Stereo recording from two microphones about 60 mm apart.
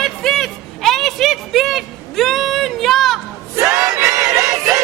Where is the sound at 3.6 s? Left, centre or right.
Right.